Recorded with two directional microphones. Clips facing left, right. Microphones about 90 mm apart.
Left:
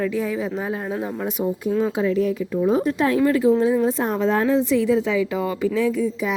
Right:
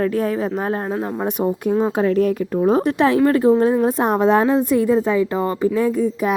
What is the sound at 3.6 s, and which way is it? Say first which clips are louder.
A woman's voice: right 3 dB; 50° right (ahead or behind).